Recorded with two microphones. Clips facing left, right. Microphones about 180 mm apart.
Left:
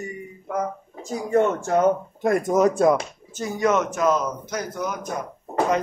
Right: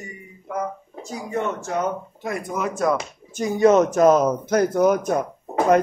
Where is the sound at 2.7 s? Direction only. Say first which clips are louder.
Left 3 dB; 20° left (ahead or behind).